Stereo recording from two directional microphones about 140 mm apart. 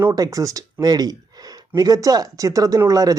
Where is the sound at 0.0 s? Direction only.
20° right (ahead or behind).